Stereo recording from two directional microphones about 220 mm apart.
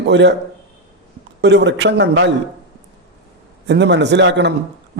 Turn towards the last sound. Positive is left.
turn(degrees=-55)  # may be behind; listen again after turning